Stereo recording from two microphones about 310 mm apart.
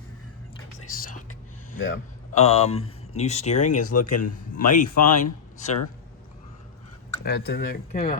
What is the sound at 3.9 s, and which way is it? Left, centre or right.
A man's voice, left.